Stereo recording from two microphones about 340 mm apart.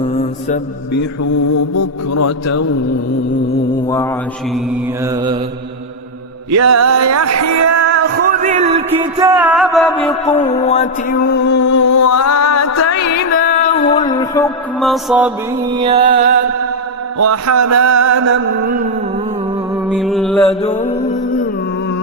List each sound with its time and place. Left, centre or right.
0.0 s mantra: centre
1.7 s music: left
6.5 s speech: right
7.9 s music: right; by 10.2 s centre
10.4 s music: centre
11.5 s music: left
13.4 s music: left
13.9 s a sound: centre
14.8 s music: centre
15.8 s music: centre
17.2 s speech: right
19.9 s music: centre